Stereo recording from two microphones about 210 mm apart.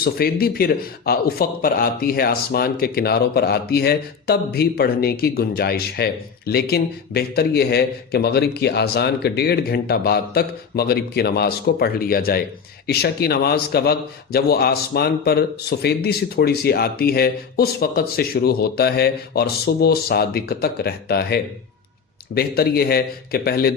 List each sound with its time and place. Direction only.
0.0 s speech: 45° left (ahead or behind)